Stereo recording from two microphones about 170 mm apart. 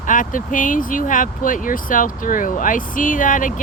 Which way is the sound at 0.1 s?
50° left (ahead or behind).